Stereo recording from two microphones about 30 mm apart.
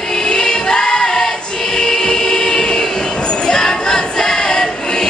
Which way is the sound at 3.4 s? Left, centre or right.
Left.